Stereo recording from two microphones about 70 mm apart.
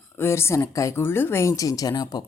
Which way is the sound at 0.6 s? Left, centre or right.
Left.